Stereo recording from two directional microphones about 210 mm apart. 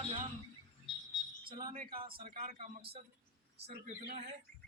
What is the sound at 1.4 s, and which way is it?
Speech, 40° right (ahead or behind).